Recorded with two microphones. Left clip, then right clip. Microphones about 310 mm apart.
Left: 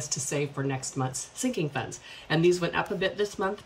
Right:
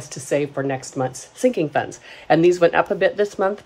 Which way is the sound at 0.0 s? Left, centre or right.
Centre.